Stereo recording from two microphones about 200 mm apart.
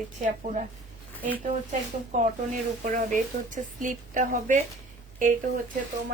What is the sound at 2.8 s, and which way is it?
A woman's voice, 40° right (ahead or behind).